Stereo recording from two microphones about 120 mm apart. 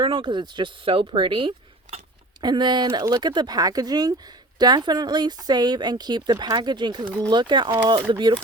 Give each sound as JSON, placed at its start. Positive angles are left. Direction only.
{"t": 0.0, "sound": "speech", "side_deg": -45}